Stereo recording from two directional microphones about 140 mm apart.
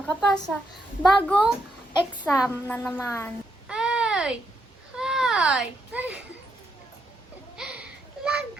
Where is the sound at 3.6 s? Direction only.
5° right (ahead or behind).